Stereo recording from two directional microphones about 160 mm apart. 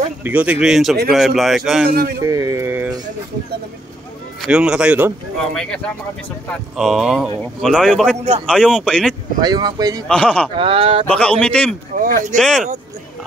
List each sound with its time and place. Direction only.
0.2 s speech: 10° right (ahead or behind)
1.9 s a man's voice: 70° right (ahead or behind)
2.1 s speech: 20° right (ahead or behind)
4.5 s speech: 5° right (ahead or behind)
5.4 s speech: 5° left (ahead or behind)
9.4 s speech: 25° right (ahead or behind)
10.0 s a man's voice: 5° left (ahead or behind)
10.6 s speech: 35° right (ahead or behind)
11.1 s a man's voice: 10° left (ahead or behind)
12.0 s speech: 55° right (ahead or behind)
12.4 s speech: 5° left (ahead or behind)